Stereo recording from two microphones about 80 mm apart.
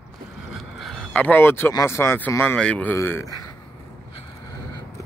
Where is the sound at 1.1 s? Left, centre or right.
Left.